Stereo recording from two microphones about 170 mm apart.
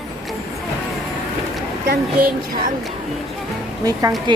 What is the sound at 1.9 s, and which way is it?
Speech, 60° right (ahead or behind).